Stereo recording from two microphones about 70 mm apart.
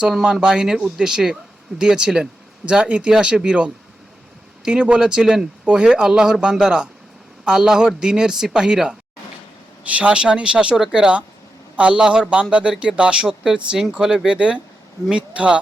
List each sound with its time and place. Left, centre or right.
0.1 s speech: centre